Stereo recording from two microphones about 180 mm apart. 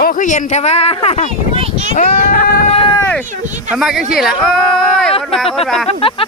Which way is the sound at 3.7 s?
Centre (ahead or behind).